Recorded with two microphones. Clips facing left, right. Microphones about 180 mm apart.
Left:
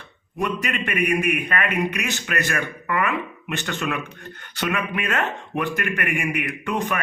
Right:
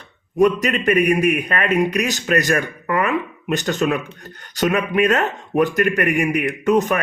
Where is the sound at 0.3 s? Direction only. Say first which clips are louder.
Right 9 dB; 40° right (ahead or behind).